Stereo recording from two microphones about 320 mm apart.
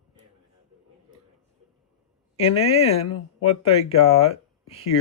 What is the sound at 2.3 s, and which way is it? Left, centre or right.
Speech, centre.